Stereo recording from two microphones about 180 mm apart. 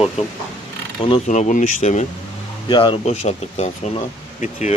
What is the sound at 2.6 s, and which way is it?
Speech, 25° left (ahead or behind).